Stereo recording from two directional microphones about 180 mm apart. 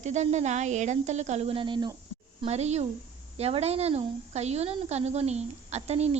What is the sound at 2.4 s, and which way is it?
A woman's voice, 35° right (ahead or behind).